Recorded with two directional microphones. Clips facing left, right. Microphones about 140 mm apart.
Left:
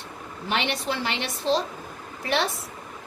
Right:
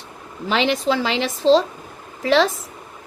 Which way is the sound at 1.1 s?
90° right.